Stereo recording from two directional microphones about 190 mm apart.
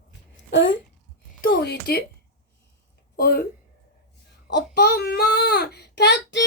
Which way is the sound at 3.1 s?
55° left (ahead or behind).